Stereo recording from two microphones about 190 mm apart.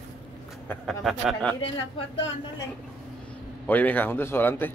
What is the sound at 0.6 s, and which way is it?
Speech, centre (ahead or behind).